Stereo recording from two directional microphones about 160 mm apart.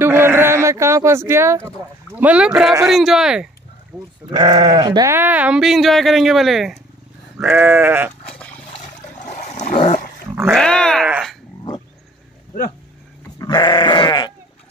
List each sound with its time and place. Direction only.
0.0 s a sound: 15° right (ahead or behind)
2.1 s sheep: 10° right (ahead or behind)
2.8 s speech: centre (ahead or behind)
3.9 s sheep: 5° right (ahead or behind)
4.3 s speech: 25° right (ahead or behind)
5.1 s speech: 10° right (ahead or behind)
7.3 s sheep: 10° right (ahead or behind)
9.2 s dog: 50° left (ahead or behind)
10.5 s speech: 5° left (ahead or behind)
13.4 s sheep: 25° left (ahead or behind)